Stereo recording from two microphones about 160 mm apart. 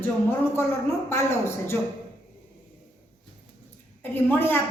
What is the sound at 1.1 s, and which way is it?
Speech, 15° left (ahead or behind).